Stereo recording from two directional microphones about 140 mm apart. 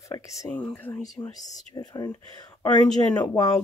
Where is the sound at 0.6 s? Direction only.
10° left (ahead or behind).